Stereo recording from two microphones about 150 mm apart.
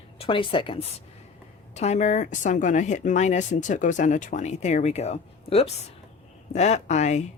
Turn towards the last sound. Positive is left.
turn(degrees=50)  # may be behind; listen again after turning